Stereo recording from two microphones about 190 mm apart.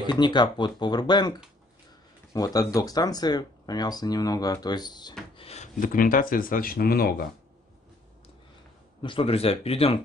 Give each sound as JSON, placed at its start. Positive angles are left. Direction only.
{"t": 0.0, "sound": "speech", "side_deg": 25}
{"t": 5.4, "sound": "speech", "side_deg": 35}
{"t": 9.0, "sound": "speech", "side_deg": 30}